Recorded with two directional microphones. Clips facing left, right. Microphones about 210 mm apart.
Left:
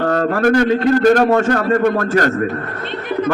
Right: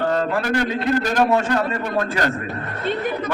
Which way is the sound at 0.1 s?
55° left (ahead or behind).